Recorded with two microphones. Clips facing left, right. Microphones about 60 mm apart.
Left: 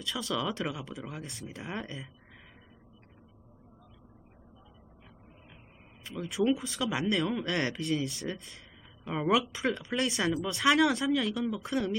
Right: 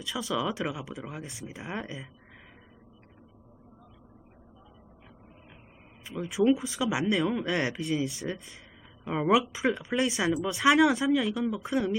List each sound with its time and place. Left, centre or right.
0.0 s speech: centre
6.1 s speech: centre